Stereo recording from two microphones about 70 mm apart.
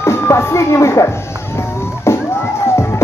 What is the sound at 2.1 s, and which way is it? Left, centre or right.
Music, left.